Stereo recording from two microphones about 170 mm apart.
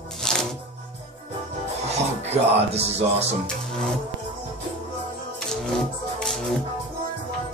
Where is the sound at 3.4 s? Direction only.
5° left (ahead or behind).